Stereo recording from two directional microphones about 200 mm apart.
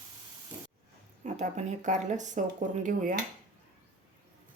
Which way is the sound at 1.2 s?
35° right (ahead or behind).